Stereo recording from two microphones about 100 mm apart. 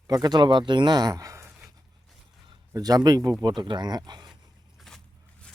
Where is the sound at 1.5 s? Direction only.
5° right (ahead or behind).